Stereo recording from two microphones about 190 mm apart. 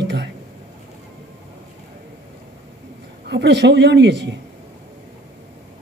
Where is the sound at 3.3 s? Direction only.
65° right (ahead or behind).